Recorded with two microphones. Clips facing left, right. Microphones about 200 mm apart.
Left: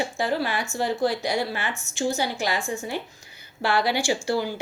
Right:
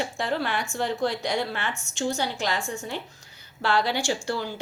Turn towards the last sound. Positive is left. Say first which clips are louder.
# left 4 dB
turn(degrees=10)  # may be behind; listen again after turning